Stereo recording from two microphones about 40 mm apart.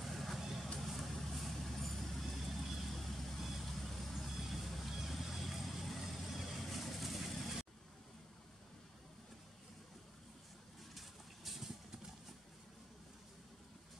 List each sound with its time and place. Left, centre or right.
0.0 s vehicle: centre
11.0 s vehicle: centre